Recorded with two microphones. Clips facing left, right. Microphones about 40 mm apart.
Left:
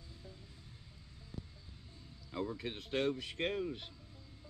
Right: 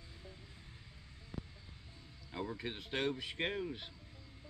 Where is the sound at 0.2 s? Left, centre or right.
Right.